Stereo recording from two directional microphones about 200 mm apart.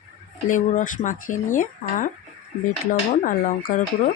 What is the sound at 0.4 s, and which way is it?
Speech, 40° left (ahead or behind).